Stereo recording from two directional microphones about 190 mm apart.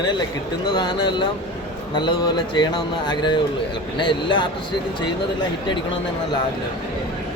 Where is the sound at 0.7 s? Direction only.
25° left (ahead or behind).